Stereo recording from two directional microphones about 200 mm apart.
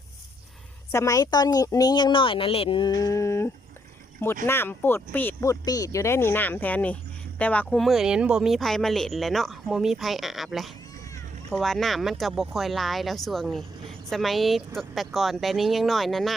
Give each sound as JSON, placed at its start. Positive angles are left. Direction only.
{"t": 0.9, "sound": "speech", "side_deg": 15}